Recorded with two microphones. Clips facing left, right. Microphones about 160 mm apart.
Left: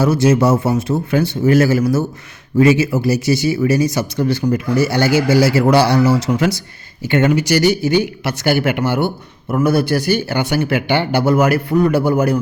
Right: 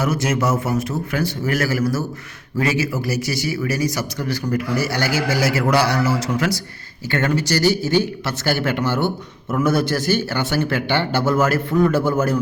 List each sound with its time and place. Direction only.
0.0 s speech: 30° left (ahead or behind); by 12.4 s 15° left (ahead or behind)